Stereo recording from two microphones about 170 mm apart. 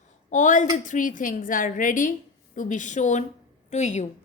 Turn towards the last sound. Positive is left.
turn(degrees=45)  # may be behind; listen again after turning